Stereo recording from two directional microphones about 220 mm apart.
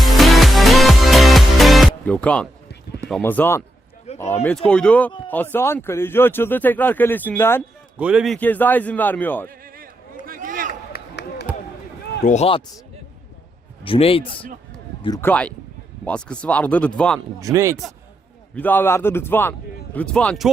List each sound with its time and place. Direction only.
0.0 s music: centre (ahead or behind)
3.1 s speech: 5° left (ahead or behind)
4.1 s a sound: 30° left (ahead or behind)
4.4 s speech: 5° left (ahead or behind)
7.9 s speech: 5° right (ahead or behind)
10.2 s a sound: 40° right (ahead or behind)
10.7 s chop: 45° left (ahead or behind)
12.2 s speech: 30° left (ahead or behind)
13.8 s speech: 25° left (ahead or behind)
15.0 s speech: 15° left (ahead or behind)
17.2 s speech: 15° right (ahead or behind)
18.5 s speech: 10° left (ahead or behind)